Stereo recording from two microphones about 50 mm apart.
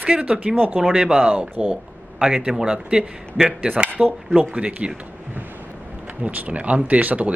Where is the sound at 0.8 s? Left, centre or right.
Centre.